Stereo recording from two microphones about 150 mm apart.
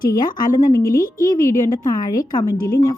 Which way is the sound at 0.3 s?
25° left (ahead or behind).